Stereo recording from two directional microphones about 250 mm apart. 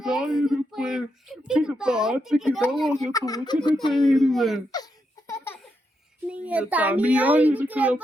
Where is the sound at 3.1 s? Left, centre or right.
Centre.